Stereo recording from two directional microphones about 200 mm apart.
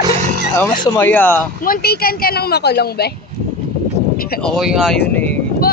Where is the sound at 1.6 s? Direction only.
50° left (ahead or behind).